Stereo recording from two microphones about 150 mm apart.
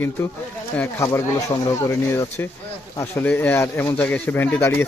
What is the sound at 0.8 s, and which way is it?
Speech, 15° left (ahead or behind).